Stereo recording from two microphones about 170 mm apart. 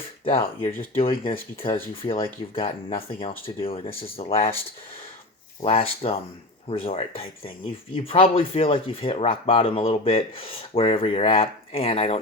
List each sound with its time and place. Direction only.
0.3 s speech: 35° left (ahead or behind)
5.6 s speech: 35° left (ahead or behind)